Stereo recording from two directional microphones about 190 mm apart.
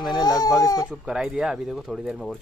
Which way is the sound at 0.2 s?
20° left (ahead or behind).